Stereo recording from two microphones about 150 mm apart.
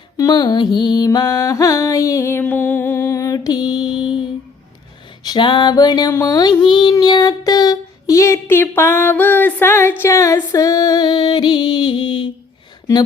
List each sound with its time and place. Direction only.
0.2 s mantra: 30° left (ahead or behind)
5.2 s female singing: 30° left (ahead or behind)
6.9 s child singing: 30° left (ahead or behind)
10.0 s female singing: 20° left (ahead or behind)